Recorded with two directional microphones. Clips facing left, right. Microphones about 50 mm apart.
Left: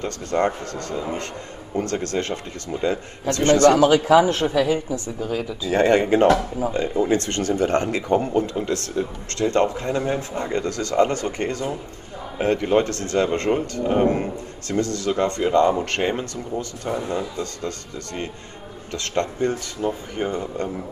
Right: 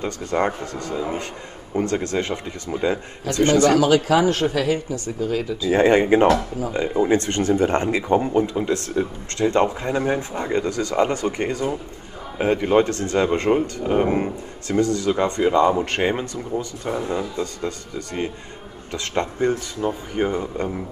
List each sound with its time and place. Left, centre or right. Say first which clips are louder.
0.0 s speech: even; centre
3.7 s a man's voice: left 2 dB; left
5.7 s speech: right 2 dB; right
17.4 s speech: right 2 dB; centre